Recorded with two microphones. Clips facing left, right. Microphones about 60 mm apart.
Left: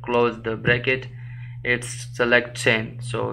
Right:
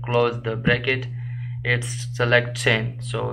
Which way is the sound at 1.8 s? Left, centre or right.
Centre.